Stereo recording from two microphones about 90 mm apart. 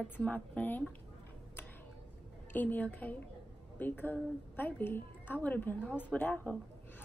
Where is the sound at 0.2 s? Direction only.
15° left (ahead or behind).